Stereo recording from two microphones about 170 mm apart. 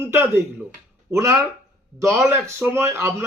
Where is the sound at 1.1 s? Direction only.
15° right (ahead or behind).